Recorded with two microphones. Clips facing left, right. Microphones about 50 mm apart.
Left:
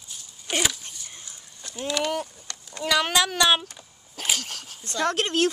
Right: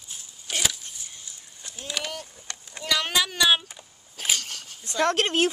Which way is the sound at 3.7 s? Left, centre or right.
Centre.